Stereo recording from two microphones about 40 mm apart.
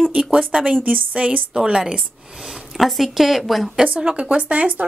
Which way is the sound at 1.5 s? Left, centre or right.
Centre.